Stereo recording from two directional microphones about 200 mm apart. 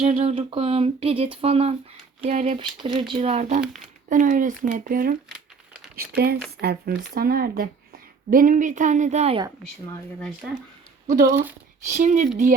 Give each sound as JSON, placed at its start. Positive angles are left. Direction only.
{"t": 0.0, "sound": "speech", "side_deg": -35}
{"t": 3.6, "sound": "speech", "side_deg": 0}
{"t": 4.1, "sound": "speech", "side_deg": -40}
{"t": 10.2, "sound": "speech", "side_deg": 5}
{"t": 11.0, "sound": "speech", "side_deg": -40}